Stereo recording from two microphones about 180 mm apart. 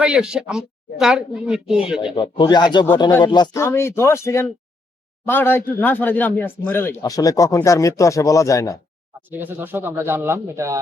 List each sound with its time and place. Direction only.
0.0 s a woman's voice: 5° right (ahead or behind)
2.1 s a man's voice: 25° left (ahead or behind)
9.3 s speech: 10° right (ahead or behind)